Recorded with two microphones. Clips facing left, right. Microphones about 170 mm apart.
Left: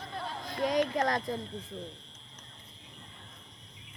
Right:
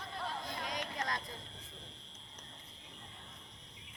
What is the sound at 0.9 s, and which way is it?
Speech, 90° left.